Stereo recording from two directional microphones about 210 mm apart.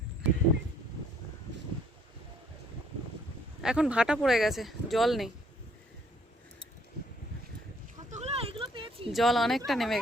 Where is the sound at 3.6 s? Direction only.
5° right (ahead or behind).